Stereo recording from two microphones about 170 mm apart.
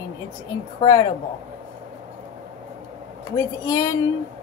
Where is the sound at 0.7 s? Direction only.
25° left (ahead or behind).